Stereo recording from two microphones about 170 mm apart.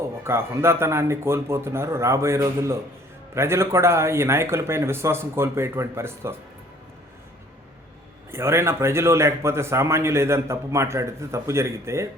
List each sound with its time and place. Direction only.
0.3 s a man's voice: 15° right (ahead or behind)
8.3 s a man's voice: 15° right (ahead or behind)